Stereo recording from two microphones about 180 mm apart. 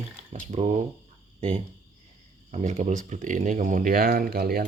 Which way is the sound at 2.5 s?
40° right (ahead or behind).